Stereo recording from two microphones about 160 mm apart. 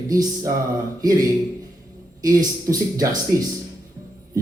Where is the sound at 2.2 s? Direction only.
20° right (ahead or behind).